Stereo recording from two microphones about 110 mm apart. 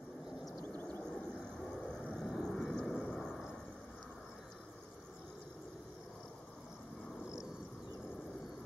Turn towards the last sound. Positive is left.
turn(degrees=30)  # may be behind; listen again after turning